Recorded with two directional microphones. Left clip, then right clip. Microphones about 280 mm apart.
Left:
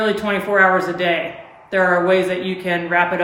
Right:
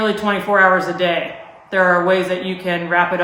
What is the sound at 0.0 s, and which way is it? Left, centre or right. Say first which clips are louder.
Speech: right 1 dB; centre.